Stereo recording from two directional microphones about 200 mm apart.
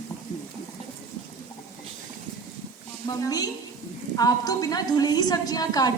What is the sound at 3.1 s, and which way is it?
A woman's voice, 20° left (ahead or behind).